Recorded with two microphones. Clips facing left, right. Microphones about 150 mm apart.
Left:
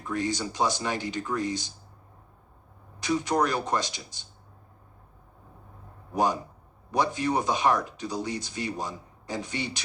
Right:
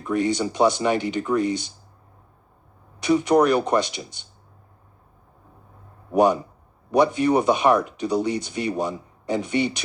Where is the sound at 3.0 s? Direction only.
65° right (ahead or behind).